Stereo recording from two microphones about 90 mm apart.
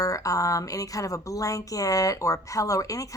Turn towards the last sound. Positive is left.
turn(degrees=40)  # may be behind; listen again after turning